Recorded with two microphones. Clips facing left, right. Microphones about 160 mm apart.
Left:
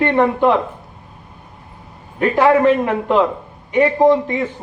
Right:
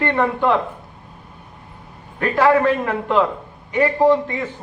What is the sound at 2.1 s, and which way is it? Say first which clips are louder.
A man's voice: left 2 dB; 20° left (ahead or behind).